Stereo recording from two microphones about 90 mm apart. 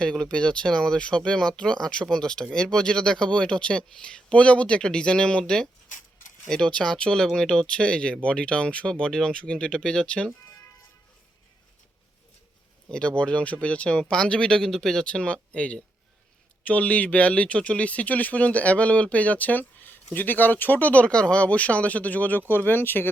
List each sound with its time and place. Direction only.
0.0 s speech: 10° left (ahead or behind)
12.9 s speech: 10° left (ahead or behind)